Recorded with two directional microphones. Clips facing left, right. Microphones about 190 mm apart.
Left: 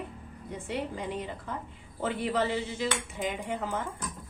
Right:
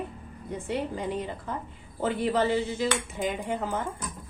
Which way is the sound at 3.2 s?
40° right (ahead or behind).